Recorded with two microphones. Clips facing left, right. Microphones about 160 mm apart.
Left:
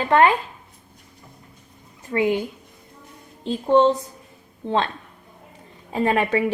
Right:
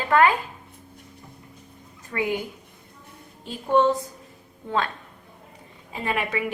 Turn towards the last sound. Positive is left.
turn(degrees=40)  # may be behind; listen again after turning